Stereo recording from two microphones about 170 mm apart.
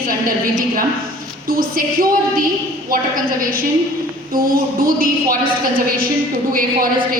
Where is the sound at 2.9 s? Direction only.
55° right (ahead or behind).